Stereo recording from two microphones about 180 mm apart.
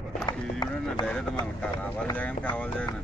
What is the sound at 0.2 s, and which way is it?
Horse, 25° left (ahead or behind).